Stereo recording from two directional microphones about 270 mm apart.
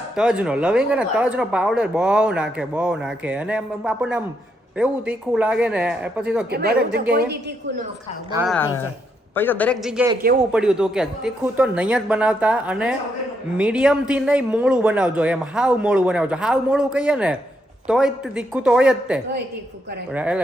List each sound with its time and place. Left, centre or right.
0.2 s speech: centre
6.5 s speech: right
8.4 s a man's voice: centre